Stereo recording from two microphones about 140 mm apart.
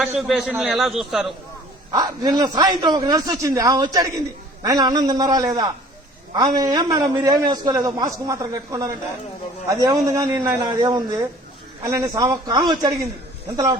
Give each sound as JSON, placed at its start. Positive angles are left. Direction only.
{"t": 0.0, "sound": "a man's voice", "side_deg": 0}
{"t": 1.9, "sound": "a man's voice", "side_deg": -25}